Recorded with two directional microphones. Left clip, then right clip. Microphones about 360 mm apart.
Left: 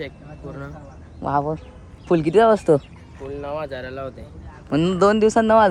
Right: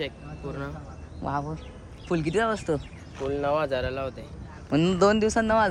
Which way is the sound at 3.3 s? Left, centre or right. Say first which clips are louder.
Right 3 dB; right.